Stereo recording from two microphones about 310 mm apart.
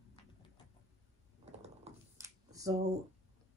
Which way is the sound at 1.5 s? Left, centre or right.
Centre.